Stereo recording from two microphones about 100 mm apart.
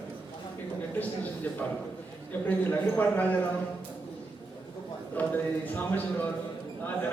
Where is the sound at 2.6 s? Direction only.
15° left (ahead or behind).